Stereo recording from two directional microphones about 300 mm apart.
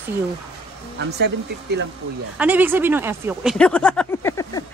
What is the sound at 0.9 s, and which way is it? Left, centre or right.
Speech, right.